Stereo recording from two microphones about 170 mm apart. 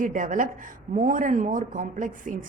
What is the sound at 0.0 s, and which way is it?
Speech, 50° right (ahead or behind).